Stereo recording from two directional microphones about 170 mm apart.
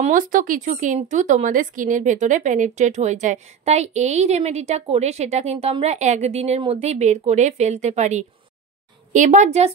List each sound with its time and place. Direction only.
0.0 s speech: 50° right (ahead or behind)